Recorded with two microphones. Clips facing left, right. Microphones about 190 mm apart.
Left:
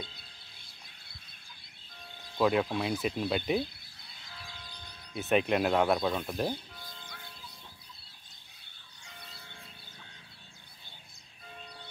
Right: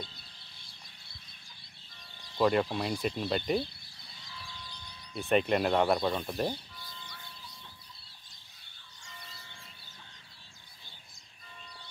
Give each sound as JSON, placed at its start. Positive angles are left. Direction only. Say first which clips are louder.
{"t": 2.3, "sound": "speech", "louder": "even", "side_deg": 0}
{"t": 5.1, "sound": "speech", "louder": "even", "side_deg": 5}
{"t": 6.8, "sound": "music", "louder": "left 1 dB", "side_deg": 50}
{"t": 9.0, "sound": "music", "louder": "even", "side_deg": 60}